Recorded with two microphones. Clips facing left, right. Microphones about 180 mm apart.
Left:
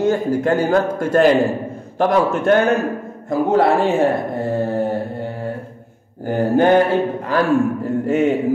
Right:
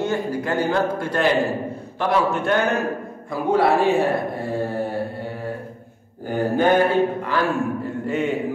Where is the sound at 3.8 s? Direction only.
20° left (ahead or behind).